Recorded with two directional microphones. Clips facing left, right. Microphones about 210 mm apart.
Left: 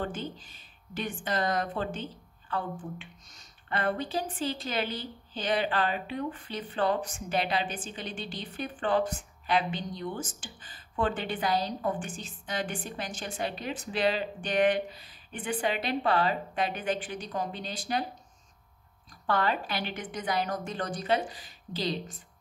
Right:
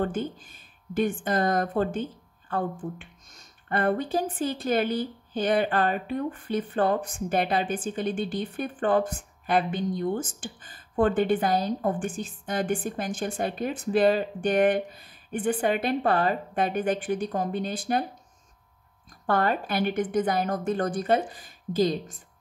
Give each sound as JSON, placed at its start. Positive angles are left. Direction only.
{"t": 0.0, "sound": "speech", "side_deg": -50}
{"t": 19.2, "sound": "speech", "side_deg": -50}